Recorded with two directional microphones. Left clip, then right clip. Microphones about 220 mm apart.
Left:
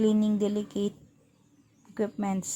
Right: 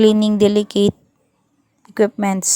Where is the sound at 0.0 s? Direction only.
35° right (ahead or behind).